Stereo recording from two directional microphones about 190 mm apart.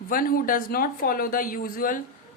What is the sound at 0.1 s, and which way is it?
Speech, 50° left (ahead or behind).